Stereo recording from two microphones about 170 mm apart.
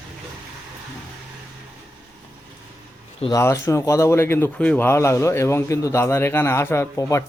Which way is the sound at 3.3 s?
15° left (ahead or behind).